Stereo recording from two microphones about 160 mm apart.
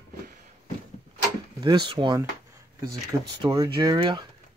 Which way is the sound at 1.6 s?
30° right (ahead or behind).